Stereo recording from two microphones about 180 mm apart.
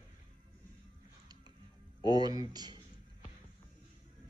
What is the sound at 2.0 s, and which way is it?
Speech, 20° right (ahead or behind).